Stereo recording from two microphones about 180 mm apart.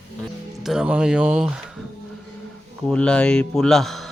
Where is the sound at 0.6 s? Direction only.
5° right (ahead or behind).